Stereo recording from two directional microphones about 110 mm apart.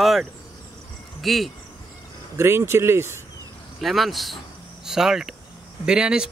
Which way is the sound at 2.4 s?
20° right (ahead or behind).